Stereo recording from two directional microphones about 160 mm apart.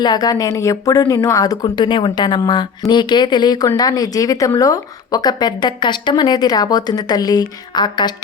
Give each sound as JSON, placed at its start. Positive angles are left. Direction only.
{"t": 0.0, "sound": "speech", "side_deg": 25}